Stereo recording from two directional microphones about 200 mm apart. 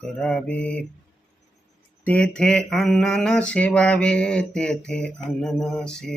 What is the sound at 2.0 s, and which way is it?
Mantra, 5° left (ahead or behind).